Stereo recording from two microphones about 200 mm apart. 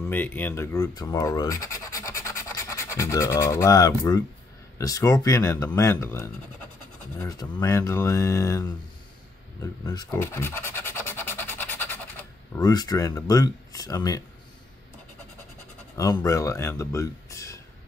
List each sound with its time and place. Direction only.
0.1 s speech: 10° left (ahead or behind)
9.6 s a sound: 15° left (ahead or behind)
16.0 s speech: 15° left (ahead or behind)